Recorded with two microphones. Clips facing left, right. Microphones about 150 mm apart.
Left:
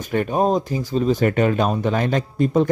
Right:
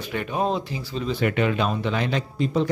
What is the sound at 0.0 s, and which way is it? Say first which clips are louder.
Speech: left 6 dB; 45° left (ahead or behind).